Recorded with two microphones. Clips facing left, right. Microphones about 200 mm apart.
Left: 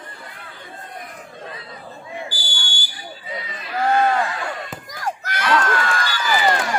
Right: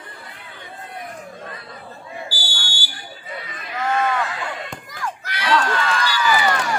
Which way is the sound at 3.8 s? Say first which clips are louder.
Left 3 dB; 35° left (ahead or behind).